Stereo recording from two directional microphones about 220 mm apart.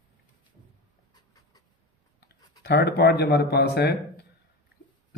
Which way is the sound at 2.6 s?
50° left (ahead or behind).